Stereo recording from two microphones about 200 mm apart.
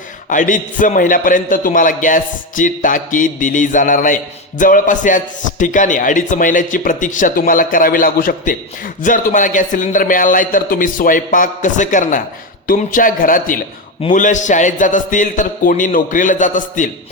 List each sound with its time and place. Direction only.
0.3 s a man's voice: 40° left (ahead or behind)